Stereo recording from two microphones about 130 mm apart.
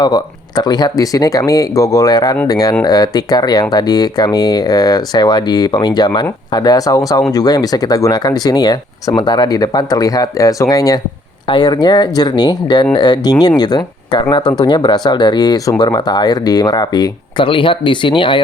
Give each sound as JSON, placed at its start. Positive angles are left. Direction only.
{"t": 0.0, "sound": "speech", "side_deg": 30}